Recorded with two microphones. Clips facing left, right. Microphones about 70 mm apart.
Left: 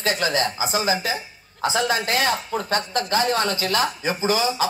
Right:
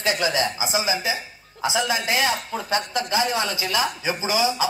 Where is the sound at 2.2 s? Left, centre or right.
Left.